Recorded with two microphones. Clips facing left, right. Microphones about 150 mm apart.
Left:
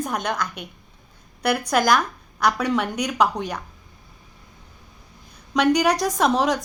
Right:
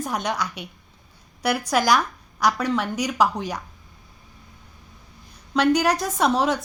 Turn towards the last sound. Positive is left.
turn(degrees=-5)  # may be behind; listen again after turning